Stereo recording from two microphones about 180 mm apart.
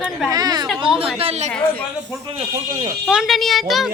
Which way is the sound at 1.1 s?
35° right (ahead or behind).